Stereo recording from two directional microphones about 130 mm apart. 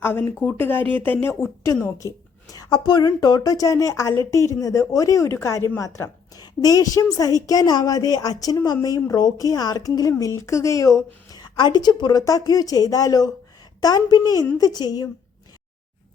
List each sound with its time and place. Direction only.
0.0 s a woman's voice: 15° left (ahead or behind)